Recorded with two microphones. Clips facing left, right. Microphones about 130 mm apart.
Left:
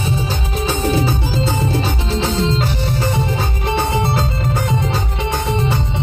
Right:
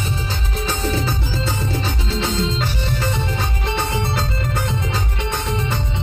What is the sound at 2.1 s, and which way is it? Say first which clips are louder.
Music: left 3 dB; 55° left (ahead or behind).